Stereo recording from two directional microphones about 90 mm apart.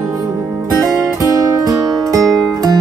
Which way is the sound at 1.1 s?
40° right (ahead or behind).